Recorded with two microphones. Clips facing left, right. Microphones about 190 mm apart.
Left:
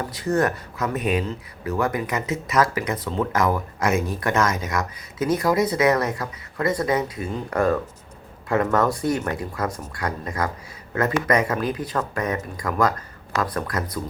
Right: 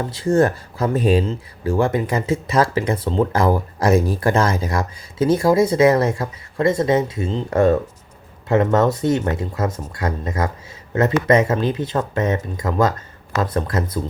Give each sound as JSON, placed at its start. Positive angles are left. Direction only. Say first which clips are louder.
{"t": 0.0, "sound": "speech", "louder": "right 5 dB", "side_deg": -25}